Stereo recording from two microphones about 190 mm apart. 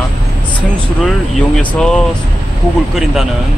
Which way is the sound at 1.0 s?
5° left (ahead or behind).